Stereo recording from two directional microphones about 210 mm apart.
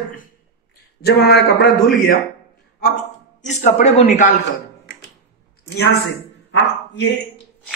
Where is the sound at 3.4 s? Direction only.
35° left (ahead or behind).